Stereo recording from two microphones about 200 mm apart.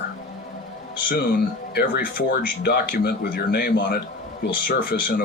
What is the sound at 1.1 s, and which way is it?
Speech, 50° left (ahead or behind).